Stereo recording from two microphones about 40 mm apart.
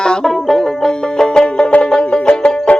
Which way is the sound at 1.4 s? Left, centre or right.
Left.